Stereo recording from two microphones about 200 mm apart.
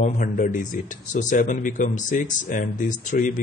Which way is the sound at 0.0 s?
40° left (ahead or behind).